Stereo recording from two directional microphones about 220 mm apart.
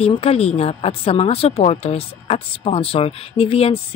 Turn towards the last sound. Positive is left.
turn(degrees=25)  # may be behind; listen again after turning